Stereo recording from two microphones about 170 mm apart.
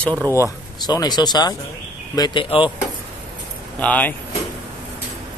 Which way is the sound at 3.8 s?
10° left (ahead or behind).